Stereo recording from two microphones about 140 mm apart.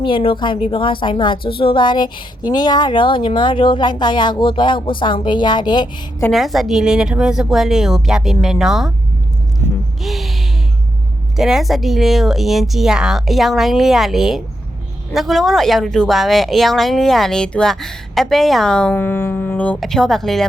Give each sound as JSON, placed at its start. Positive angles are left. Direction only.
{"t": 0.0, "sound": "a woman's voice", "side_deg": 40}
{"t": 6.3, "sound": "speech", "side_deg": 0}
{"t": 10.0, "sound": "speech", "side_deg": 0}
{"t": 11.3, "sound": "speech", "side_deg": -5}